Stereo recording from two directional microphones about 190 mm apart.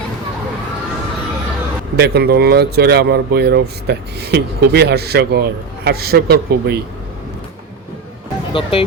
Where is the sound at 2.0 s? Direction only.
60° right (ahead or behind).